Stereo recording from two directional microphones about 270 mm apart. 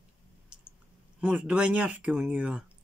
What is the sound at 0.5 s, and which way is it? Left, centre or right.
Clicking, centre.